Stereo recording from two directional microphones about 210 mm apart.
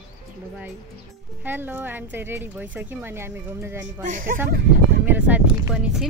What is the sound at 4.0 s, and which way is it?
Speech, 40° right (ahead or behind).